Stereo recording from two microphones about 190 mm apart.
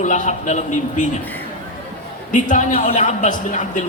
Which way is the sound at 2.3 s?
40° left (ahead or behind).